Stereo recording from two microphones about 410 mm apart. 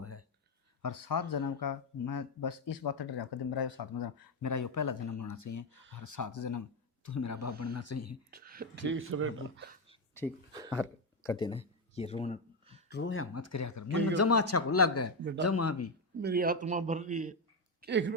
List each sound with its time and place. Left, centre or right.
0.0 s a sound: left
0.8 s speech: left
8.3 s speech: right
9.9 s a sound: centre
10.8 s speech: centre
12.9 s speech: left
16.2 s a man's voice: right